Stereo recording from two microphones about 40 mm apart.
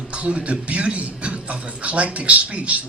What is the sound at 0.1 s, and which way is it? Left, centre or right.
A man's voice, right.